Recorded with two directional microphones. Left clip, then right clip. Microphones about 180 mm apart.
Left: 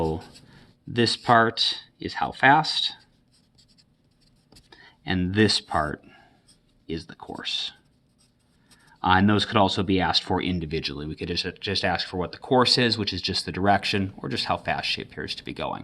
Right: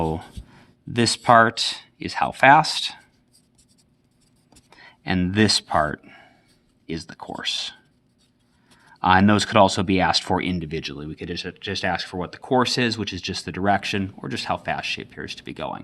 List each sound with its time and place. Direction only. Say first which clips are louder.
0.0 s speech: right 2 dB; 35° right (ahead or behind)
4.7 s speech: right 3 dB; 30° right (ahead or behind)
8.9 s speech: right 4 dB; 30° right (ahead or behind); by 15.8 s 10° right (ahead or behind)